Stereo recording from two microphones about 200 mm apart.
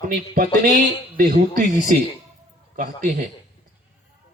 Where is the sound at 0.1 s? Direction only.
45° right (ahead or behind).